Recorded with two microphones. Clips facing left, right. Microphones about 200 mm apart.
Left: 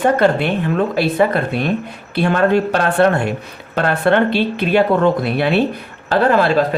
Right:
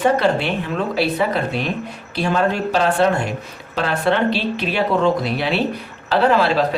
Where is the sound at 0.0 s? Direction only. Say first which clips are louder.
Left 3 dB; 55° left (ahead or behind).